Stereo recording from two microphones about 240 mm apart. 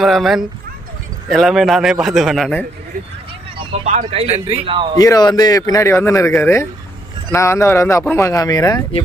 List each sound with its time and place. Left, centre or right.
0.0 s a man's voice: centre
3.6 s speech: right
4.9 s speech: centre